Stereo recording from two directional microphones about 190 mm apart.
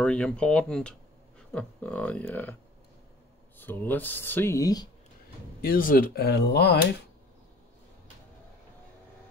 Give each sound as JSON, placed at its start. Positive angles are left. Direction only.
{"t": 0.0, "sound": "speech", "side_deg": 5}
{"t": 3.5, "sound": "speech", "side_deg": 10}
{"t": 5.6, "sound": "speech", "side_deg": 50}